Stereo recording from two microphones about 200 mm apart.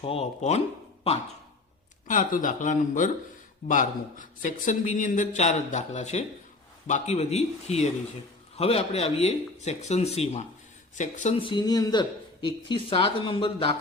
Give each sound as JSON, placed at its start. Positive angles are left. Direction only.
{"t": 0.0, "sound": "a man's voice", "side_deg": 30}
{"t": 2.0, "sound": "a man's voice", "side_deg": 40}